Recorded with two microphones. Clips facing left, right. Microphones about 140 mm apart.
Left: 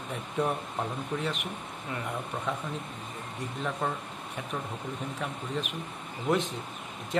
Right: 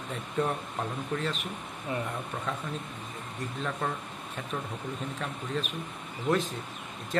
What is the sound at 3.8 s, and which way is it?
Speech, 10° left (ahead or behind).